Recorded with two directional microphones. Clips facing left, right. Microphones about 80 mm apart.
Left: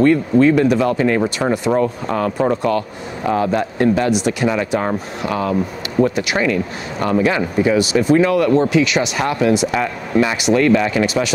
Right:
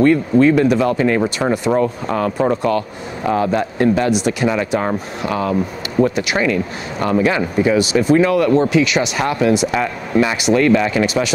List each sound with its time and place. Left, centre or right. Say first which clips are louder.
0.0 s speech: even; centre
4.5 s speech: even; right
5.5 s speech: even; right
6.3 s speech: even; right